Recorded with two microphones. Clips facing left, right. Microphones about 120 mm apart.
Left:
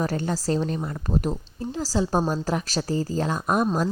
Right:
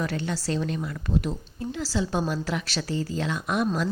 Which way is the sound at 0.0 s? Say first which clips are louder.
Left 3 dB; 40° left (ahead or behind).